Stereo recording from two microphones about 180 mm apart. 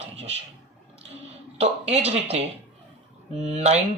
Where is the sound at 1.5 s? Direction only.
35° right (ahead or behind).